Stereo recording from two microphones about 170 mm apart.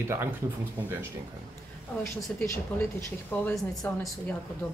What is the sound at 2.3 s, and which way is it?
Speech, 10° left (ahead or behind).